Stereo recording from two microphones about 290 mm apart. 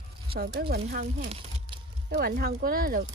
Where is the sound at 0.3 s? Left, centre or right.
Right.